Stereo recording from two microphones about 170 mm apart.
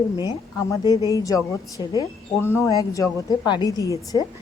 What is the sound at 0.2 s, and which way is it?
Speech, 25° left (ahead or behind).